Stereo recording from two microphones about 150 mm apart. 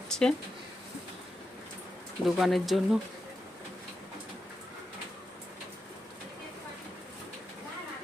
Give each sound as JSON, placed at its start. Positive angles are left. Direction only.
{"t": 0.1, "sound": "speech", "side_deg": 5}
{"t": 2.2, "sound": "speech", "side_deg": 0}